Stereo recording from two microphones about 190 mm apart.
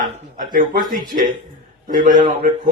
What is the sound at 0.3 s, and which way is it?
Speech, 45° right (ahead or behind).